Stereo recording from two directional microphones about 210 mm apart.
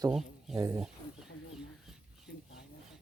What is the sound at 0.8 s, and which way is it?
Wild animals, centre (ahead or behind).